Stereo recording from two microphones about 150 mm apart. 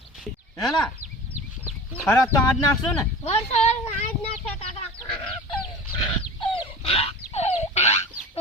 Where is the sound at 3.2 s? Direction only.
45° left (ahead or behind).